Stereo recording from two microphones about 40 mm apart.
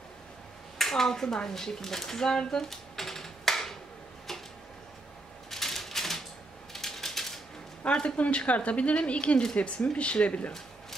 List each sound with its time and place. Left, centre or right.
0.7 s speech: centre
4.3 s a sound: centre
5.5 s typewriter: centre
6.7 s ratchet: centre
7.8 s a woman's voice: left